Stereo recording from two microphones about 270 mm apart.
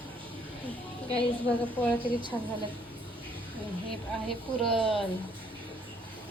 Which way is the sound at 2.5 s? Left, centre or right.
Centre.